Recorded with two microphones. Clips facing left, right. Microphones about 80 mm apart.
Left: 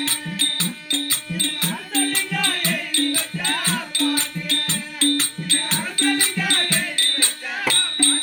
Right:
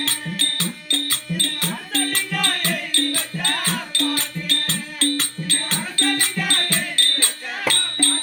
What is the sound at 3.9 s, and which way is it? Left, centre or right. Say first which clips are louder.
Music: left 2 dB; right.